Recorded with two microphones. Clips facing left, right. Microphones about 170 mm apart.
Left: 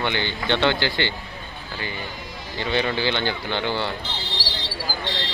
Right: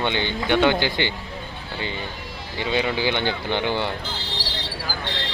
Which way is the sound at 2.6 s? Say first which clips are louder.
Even; 15° right (ahead or behind).